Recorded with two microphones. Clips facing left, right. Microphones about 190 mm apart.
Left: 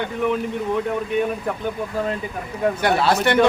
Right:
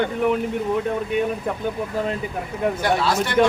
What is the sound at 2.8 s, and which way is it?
Speech, 65° left (ahead or behind).